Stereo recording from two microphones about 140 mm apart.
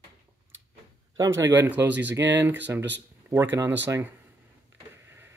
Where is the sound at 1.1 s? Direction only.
20° right (ahead or behind).